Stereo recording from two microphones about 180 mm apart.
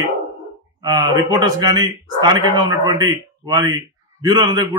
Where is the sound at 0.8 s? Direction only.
20° right (ahead or behind).